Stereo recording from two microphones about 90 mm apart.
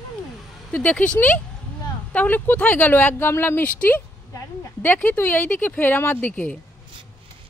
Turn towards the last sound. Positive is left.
turn(degrees=15)  # may be behind; listen again after turning